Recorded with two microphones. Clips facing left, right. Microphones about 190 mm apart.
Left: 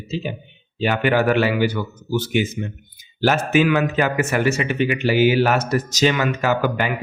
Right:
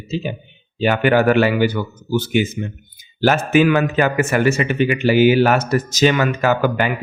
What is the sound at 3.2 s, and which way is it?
A man's voice, 50° right (ahead or behind).